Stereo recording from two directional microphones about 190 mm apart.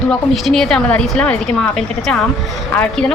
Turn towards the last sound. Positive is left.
turn(degrees=10)  # may be behind; listen again after turning